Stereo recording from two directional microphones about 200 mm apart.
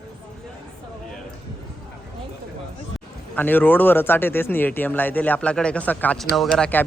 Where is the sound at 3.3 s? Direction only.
10° left (ahead or behind).